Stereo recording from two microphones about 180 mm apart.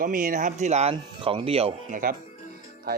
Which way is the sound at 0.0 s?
50° right (ahead or behind).